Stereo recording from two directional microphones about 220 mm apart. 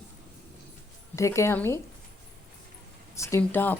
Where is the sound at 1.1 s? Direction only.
15° left (ahead or behind).